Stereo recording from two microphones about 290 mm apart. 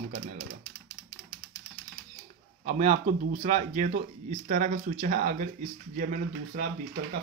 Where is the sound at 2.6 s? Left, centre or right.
Right.